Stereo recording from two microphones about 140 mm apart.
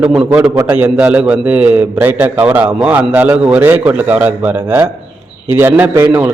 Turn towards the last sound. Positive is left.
turn(degrees=-15)  # may be behind; listen again after turning